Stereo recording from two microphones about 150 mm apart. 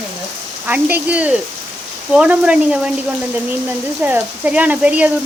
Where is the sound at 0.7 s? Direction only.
10° right (ahead or behind).